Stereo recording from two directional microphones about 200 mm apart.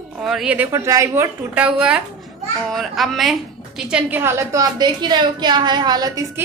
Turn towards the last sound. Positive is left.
turn(degrees=-20)  # may be behind; listen again after turning